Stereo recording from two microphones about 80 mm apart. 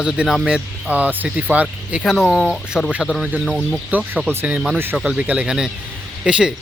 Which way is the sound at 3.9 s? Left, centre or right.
Centre.